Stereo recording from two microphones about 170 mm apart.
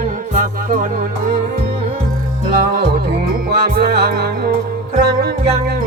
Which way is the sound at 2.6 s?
65° right (ahead or behind).